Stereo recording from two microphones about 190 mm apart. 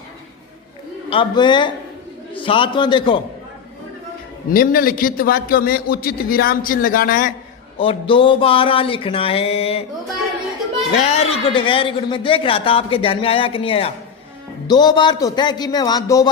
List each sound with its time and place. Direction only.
1.1 s a man's voice: 25° left (ahead or behind)
4.5 s a man's voice: 50° left (ahead or behind)
7.8 s a man's voice: 25° left (ahead or behind)
11.0 s a man's voice: 35° left (ahead or behind)